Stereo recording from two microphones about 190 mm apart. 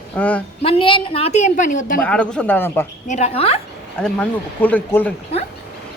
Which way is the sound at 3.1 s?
35° left (ahead or behind).